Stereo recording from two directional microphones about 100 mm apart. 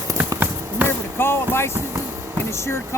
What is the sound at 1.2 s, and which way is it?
Speech, 25° left (ahead or behind).